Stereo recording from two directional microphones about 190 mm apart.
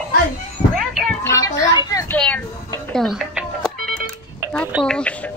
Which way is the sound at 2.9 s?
Centre (ahead or behind).